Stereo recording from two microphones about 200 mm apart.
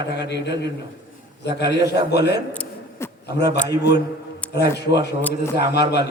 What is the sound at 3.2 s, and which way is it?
Speech, 55° left (ahead or behind).